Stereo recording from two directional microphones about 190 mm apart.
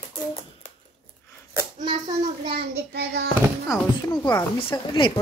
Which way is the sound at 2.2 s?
40° right (ahead or behind).